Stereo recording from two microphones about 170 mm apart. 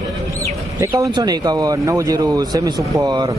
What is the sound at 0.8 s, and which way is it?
Speech, 20° right (ahead or behind).